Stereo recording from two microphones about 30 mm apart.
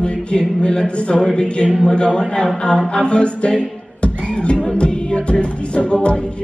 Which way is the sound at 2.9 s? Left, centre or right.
Left.